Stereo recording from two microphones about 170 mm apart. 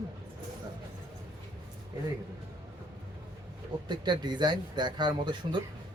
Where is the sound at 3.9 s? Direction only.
25° right (ahead or behind).